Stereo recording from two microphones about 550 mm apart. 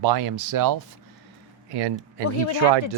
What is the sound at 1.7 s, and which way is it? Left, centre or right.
Speech, right.